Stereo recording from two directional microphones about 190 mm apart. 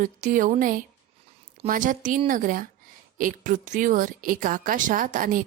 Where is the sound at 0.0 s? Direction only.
45° right (ahead or behind).